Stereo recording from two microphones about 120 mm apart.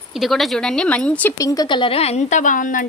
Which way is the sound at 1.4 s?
30° left (ahead or behind).